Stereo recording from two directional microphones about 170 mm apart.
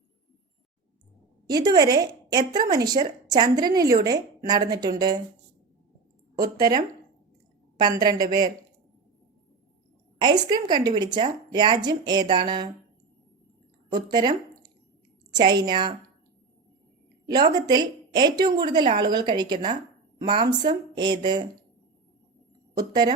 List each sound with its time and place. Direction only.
1.5 s a woman's voice: 25° right (ahead or behind)
6.3 s a woman's voice: 20° right (ahead or behind)
10.2 s a woman's voice: 25° right (ahead or behind)
13.9 s a woman's voice: 25° right (ahead or behind)
17.5 s a woman's voice: 25° right (ahead or behind)
22.8 s a woman's voice: 25° right (ahead or behind)